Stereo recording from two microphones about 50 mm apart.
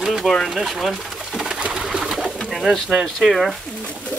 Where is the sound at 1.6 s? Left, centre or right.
Centre.